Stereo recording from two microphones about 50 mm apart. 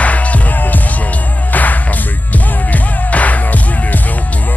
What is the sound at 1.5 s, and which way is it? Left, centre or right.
Music, left.